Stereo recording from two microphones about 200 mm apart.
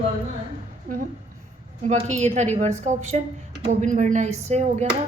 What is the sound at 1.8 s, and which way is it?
A woman's voice, 35° right (ahead or behind).